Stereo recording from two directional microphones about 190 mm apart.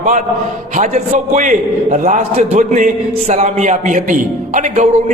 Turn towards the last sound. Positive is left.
turn(degrees=-40)  # may be behind; listen again after turning